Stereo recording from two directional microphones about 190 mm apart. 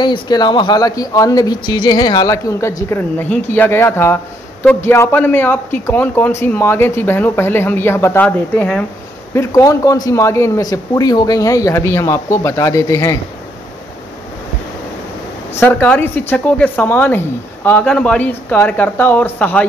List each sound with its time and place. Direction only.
0.0 s speech: 20° left (ahead or behind)
15.6 s speech: 10° left (ahead or behind)